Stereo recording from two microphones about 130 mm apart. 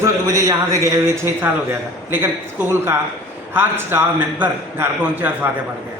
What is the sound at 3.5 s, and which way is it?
A man's voice, 15° right (ahead or behind).